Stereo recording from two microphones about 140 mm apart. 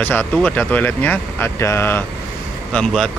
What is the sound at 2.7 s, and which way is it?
Speech, centre (ahead or behind).